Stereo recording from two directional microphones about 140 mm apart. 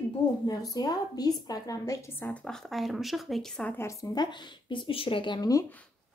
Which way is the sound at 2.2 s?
5° left (ahead or behind).